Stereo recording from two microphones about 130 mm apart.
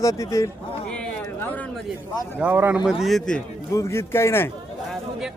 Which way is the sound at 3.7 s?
20° left (ahead or behind).